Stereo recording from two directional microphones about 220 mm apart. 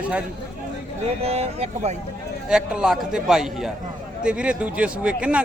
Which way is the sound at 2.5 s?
Centre (ahead or behind).